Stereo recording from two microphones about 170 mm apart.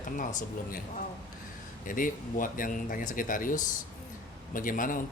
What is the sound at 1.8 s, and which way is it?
Speech, 50° left (ahead or behind).